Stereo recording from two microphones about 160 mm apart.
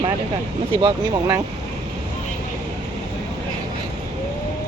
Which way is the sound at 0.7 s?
35° right (ahead or behind).